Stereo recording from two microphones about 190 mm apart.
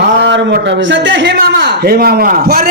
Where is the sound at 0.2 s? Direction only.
65° right (ahead or behind).